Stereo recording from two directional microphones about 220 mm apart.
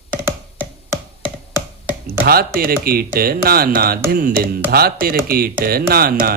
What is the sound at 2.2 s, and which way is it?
A man's voice, 45° right (ahead or behind).